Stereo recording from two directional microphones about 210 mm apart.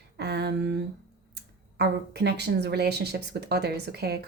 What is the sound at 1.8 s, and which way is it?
Speech, 50° right (ahead or behind).